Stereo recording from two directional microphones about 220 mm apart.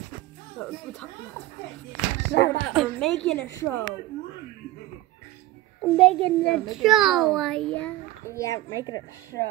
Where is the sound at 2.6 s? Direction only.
Centre (ahead or behind).